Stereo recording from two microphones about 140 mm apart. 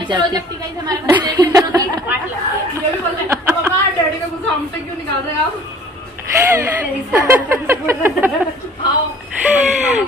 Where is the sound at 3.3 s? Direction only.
15° right (ahead or behind).